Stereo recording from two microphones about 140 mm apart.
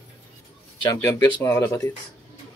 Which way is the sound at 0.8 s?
25° left (ahead or behind).